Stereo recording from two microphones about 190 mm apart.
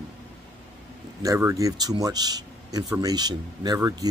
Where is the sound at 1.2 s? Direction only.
15° right (ahead or behind).